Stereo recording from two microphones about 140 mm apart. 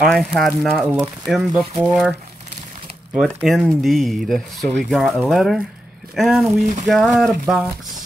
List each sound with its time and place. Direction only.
0.0 s speech: centre (ahead or behind)
3.4 s speech: centre (ahead or behind)
6.6 s a sound: 60° right (ahead or behind)
6.9 s speech: centre (ahead or behind)